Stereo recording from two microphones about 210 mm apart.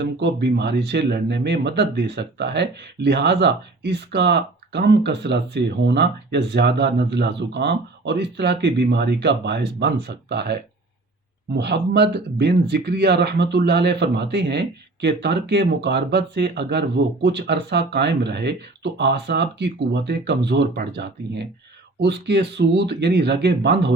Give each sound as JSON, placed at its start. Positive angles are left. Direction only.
{"t": 0.0, "sound": "speech", "side_deg": -55}